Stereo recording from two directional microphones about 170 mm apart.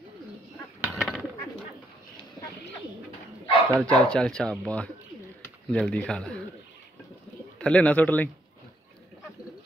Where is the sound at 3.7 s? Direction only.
5° left (ahead or behind).